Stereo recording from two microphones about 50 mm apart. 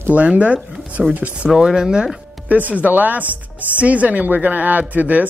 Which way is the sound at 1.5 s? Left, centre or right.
Centre.